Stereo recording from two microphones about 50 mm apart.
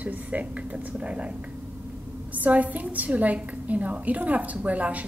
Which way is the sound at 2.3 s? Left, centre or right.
Right.